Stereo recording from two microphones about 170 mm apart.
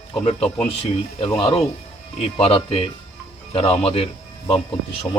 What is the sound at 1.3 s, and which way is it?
Speech, 35° left (ahead or behind).